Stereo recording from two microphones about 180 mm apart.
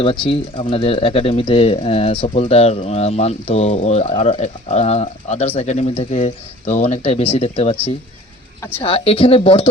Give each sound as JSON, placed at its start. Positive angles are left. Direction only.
{"t": 0.0, "sound": "speech", "side_deg": 30}
{"t": 8.8, "sound": "speech", "side_deg": 30}